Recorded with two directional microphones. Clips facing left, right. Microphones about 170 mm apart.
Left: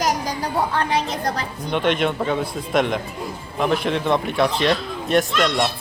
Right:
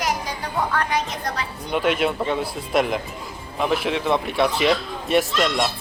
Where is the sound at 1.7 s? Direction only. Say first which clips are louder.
Left 1 dB; 5° right (ahead or behind).